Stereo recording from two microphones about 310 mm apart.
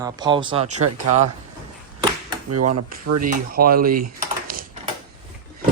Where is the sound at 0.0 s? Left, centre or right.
Centre.